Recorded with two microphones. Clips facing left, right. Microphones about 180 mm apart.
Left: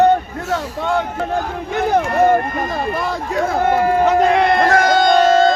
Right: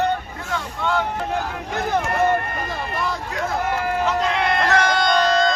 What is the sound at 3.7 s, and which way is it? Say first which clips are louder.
Speech: left 9 dB; 55° left (ahead or behind).